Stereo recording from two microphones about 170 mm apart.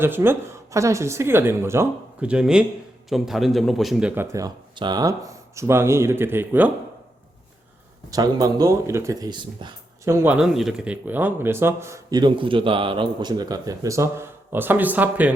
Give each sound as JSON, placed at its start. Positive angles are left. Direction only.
{"t": 0.0, "sound": "speech", "side_deg": -15}
{"t": 8.1, "sound": "speech", "side_deg": -20}
{"t": 10.1, "sound": "speech", "side_deg": -5}